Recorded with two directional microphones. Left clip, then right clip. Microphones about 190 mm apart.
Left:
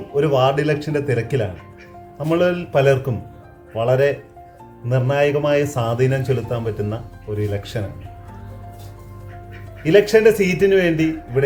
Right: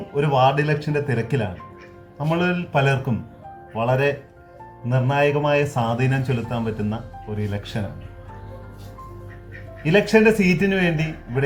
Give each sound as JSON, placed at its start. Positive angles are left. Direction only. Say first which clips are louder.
{"t": 0.2, "sound": "a man's voice", "louder": "left 2 dB", "side_deg": 15}
{"t": 9.8, "sound": "a man's voice", "louder": "left 4 dB", "side_deg": 15}